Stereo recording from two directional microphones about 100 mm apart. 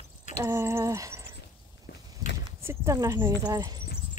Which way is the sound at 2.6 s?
25° right (ahead or behind).